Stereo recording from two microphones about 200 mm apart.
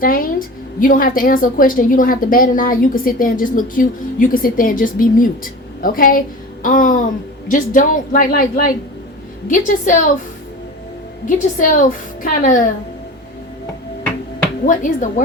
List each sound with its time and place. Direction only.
0.0 s a woman's voice: 45° left (ahead or behind)
11.3 s a woman's voice: 40° left (ahead or behind)
14.6 s a woman's voice: 40° left (ahead or behind)